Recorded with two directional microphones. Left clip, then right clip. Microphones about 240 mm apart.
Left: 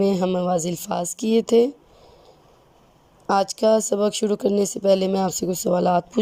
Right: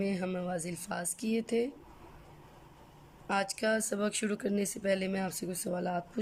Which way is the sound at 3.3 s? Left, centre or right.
Left.